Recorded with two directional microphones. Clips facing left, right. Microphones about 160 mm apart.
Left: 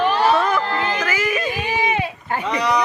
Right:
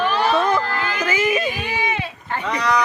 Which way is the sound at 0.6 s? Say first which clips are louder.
Left 3 dB; 25° left (ahead or behind).